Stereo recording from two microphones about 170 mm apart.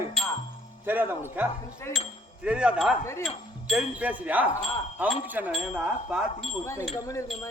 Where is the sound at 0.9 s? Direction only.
10° right (ahead or behind).